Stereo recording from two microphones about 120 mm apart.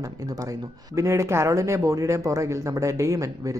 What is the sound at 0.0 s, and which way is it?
Speech, 30° right (ahead or behind).